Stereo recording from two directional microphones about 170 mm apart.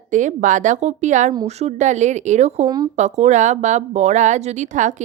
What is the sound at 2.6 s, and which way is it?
Speech, 25° right (ahead or behind).